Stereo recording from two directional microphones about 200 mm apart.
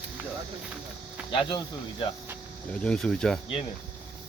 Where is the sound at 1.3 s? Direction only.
25° left (ahead or behind).